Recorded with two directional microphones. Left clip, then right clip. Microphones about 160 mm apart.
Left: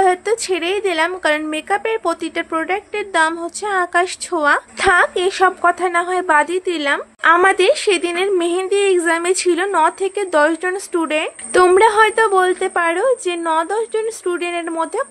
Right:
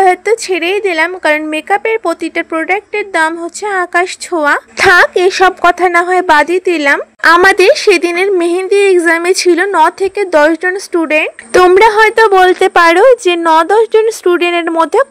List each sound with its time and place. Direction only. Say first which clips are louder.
0.0 s a woman's voice: right 6 dB; 30° right (ahead or behind)
4.7 s a woman's voice: right 7 dB; 55° right (ahead or behind); by 12.3 s 35° right (ahead or behind)
12.3 s a woman's voice: right 9 dB; 60° right (ahead or behind)